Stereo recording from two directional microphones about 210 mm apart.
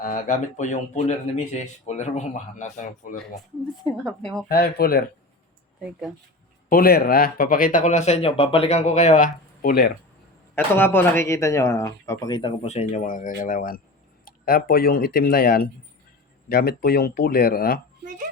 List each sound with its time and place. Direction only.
0.0 s speech: 40° left (ahead or behind)
4.4 s speech: 45° left (ahead or behind)
6.7 s speech: 45° left (ahead or behind)
10.5 s speech: 10° left (ahead or behind); by 17.7 s 45° left (ahead or behind)